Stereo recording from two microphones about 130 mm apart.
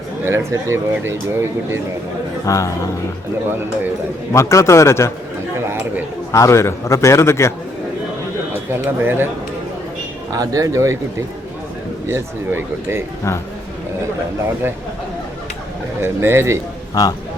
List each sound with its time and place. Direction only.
0.3 s speech: 20° right (ahead or behind)
2.5 s a man's voice: 25° left (ahead or behind)
4.3 s a man's voice: 20° left (ahead or behind)
6.3 s a man's voice: 25° left (ahead or behind)
8.7 s speech: 15° right (ahead or behind)
10.3 s speech: 30° right (ahead or behind)
12.0 s speech: 20° right (ahead or behind)
16.0 s speech: 20° right (ahead or behind)
16.9 s a man's voice: 30° left (ahead or behind)